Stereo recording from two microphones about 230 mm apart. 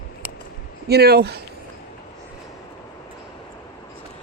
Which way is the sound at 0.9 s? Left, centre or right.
Right.